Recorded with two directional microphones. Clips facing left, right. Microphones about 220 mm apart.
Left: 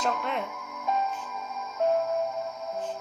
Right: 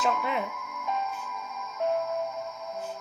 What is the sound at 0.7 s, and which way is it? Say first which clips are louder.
Music: left 3 dB; 35° left (ahead or behind).